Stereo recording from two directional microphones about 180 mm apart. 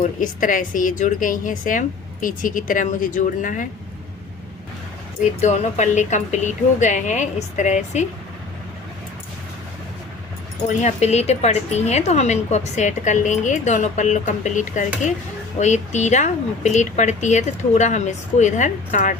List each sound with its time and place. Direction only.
0.0 s a woman's voice: 45° left (ahead or behind)
5.4 s a woman's voice: 40° left (ahead or behind)
10.7 s a woman's voice: 40° left (ahead or behind)